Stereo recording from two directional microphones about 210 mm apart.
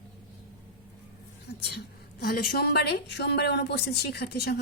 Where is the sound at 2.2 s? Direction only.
45° left (ahead or behind).